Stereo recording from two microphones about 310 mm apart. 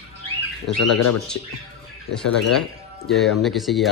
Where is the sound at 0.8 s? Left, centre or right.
Left.